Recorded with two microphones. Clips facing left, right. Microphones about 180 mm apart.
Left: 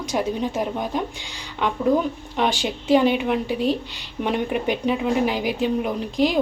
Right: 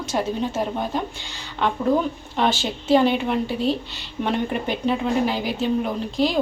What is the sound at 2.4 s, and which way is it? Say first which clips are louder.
A woman's voice: right 1 dB; 15° left (ahead or behind).